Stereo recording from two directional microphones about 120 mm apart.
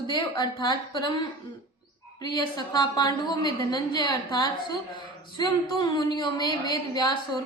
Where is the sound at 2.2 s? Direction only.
35° left (ahead or behind).